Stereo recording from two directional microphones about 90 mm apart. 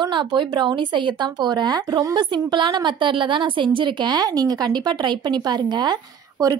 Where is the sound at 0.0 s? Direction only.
60° right (ahead or behind).